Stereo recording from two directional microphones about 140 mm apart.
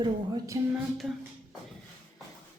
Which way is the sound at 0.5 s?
25° right (ahead or behind).